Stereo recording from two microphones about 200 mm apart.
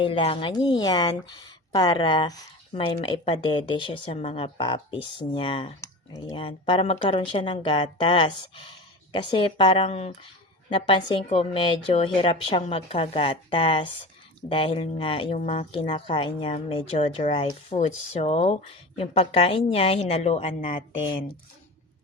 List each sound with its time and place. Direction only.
0.0 s speech: 30° left (ahead or behind)